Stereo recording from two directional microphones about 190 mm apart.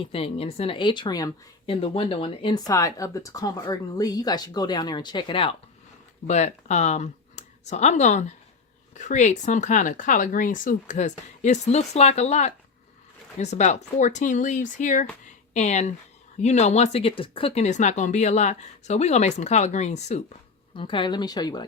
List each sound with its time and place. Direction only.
0.0 s speech: 30° left (ahead or behind)
20.7 s speech: 25° left (ahead or behind)